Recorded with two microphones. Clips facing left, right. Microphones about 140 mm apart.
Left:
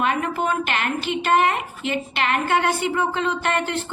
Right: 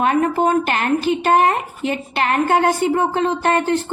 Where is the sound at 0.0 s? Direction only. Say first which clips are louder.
Right 6 dB; 40° right (ahead or behind).